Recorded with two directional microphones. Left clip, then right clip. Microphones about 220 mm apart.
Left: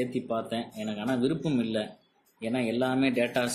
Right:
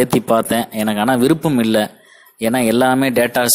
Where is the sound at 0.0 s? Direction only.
45° right (ahead or behind).